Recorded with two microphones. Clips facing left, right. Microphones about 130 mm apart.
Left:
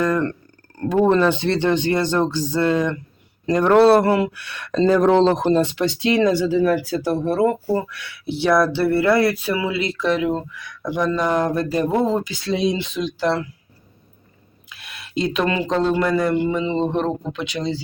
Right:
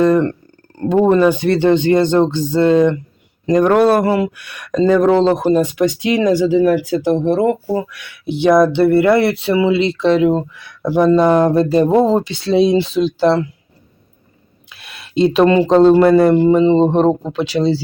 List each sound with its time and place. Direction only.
0.0 s speech: 25° right (ahead or behind)
1.1 s speech: 10° right (ahead or behind); by 13.5 s 30° right (ahead or behind)
14.7 s speech: 30° right (ahead or behind)